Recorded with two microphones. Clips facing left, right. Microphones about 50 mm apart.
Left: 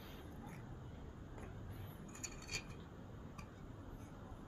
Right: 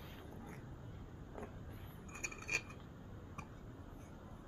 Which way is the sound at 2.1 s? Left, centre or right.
Right.